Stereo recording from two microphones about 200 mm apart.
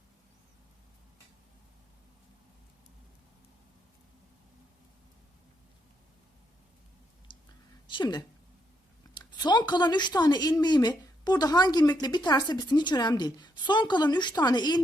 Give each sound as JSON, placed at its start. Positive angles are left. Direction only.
{"t": 7.9, "sound": "a woman's voice", "side_deg": 20}